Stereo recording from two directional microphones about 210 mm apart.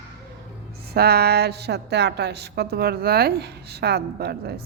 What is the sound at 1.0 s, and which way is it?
A woman's voice, 50° right (ahead or behind).